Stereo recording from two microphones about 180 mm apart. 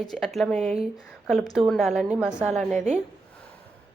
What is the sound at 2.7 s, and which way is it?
Speech, 40° right (ahead or behind).